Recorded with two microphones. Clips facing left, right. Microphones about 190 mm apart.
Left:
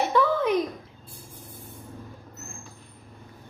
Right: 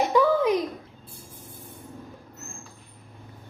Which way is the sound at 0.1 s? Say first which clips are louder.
Right 2 dB; 10° right (ahead or behind).